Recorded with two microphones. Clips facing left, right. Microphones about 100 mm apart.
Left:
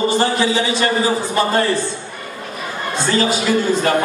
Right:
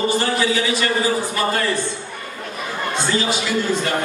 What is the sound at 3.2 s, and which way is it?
Speech, 45° left (ahead or behind).